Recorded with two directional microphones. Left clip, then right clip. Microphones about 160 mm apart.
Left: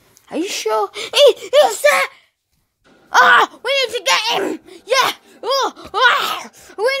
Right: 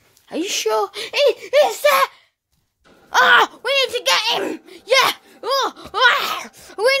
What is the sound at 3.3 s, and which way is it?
Speech, 10° left (ahead or behind).